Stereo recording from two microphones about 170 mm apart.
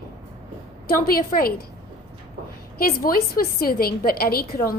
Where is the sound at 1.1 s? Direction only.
60° left (ahead or behind).